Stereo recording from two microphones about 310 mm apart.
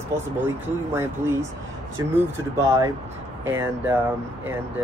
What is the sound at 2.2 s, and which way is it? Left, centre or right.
Speech, centre.